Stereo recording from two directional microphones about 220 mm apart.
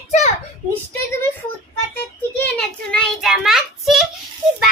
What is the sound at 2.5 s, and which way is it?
A child's voice, centre (ahead or behind).